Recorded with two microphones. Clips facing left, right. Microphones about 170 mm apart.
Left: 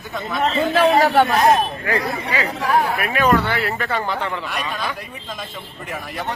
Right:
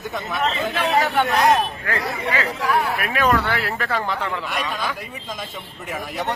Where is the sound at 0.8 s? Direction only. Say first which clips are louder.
Left 6 dB; 40° left (ahead or behind).